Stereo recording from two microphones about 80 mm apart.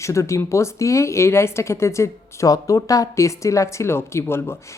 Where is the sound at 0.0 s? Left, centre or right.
Left.